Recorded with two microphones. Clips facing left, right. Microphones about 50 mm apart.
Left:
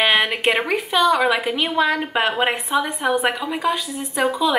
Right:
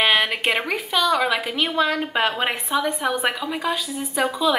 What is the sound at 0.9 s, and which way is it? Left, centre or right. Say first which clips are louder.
A woman's voice: left 3 dB; centre.